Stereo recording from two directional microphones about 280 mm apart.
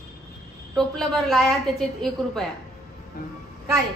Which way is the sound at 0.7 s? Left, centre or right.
Centre.